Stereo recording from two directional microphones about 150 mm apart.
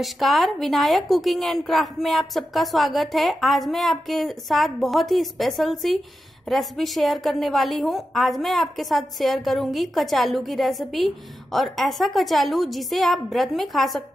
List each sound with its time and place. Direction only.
0.0 s a woman's voice: centre (ahead or behind)